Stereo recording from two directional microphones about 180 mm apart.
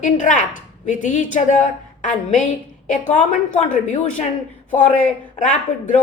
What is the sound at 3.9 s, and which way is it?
Speech, 40° left (ahead or behind).